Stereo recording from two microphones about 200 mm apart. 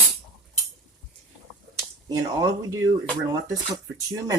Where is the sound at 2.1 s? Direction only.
20° right (ahead or behind).